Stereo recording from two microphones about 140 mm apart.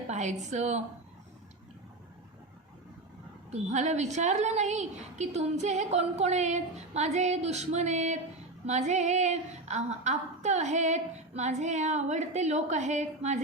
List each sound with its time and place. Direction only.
0.1 s a sound: 55° right (ahead or behind)
0.5 s female singing: 55° right (ahead or behind)
3.5 s female singing: 55° right (ahead or behind)